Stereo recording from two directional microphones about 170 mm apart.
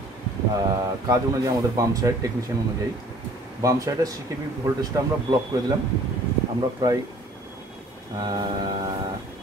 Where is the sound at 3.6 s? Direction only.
20° right (ahead or behind).